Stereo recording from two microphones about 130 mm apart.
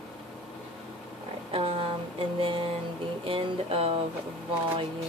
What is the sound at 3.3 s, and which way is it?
Speech, 45° right (ahead or behind).